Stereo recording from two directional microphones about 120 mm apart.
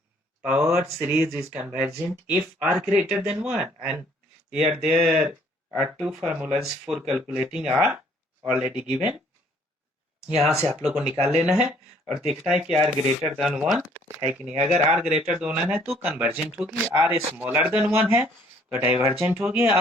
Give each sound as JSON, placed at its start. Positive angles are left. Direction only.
{"t": 0.9, "sound": "speech", "side_deg": -20}
{"t": 6.6, "sound": "speech", "side_deg": -5}
{"t": 10.2, "sound": "speech", "side_deg": -10}